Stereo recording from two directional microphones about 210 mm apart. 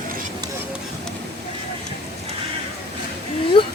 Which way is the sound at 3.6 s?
25° left (ahead or behind).